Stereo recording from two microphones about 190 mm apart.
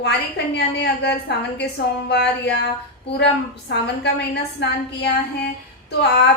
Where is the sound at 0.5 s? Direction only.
60° left (ahead or behind).